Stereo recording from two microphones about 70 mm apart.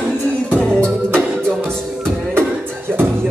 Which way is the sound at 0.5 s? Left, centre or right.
Centre.